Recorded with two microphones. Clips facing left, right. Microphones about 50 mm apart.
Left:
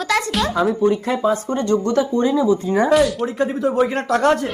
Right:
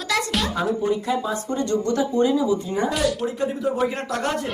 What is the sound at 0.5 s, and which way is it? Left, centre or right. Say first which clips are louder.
Speech: left 7 dB; left.